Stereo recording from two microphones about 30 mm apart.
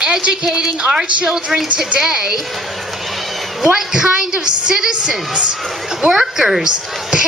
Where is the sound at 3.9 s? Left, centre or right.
Right.